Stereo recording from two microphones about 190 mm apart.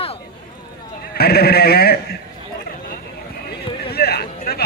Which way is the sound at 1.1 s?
55° left (ahead or behind).